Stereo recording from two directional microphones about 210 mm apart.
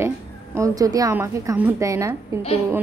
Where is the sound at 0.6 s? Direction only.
15° right (ahead or behind).